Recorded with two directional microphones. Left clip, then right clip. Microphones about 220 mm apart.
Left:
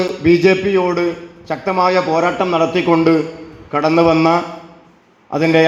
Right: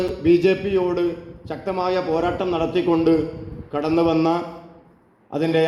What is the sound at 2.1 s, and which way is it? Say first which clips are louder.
Speech: left 6 dB; 30° left (ahead or behind).